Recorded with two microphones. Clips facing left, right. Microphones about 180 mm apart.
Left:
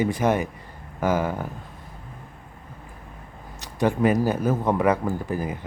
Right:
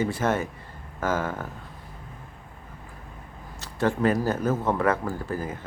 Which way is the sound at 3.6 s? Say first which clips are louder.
Left 2 dB; 15° left (ahead or behind).